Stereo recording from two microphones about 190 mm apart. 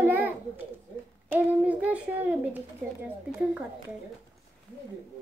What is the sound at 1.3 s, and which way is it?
A child's voice, 10° right (ahead or behind).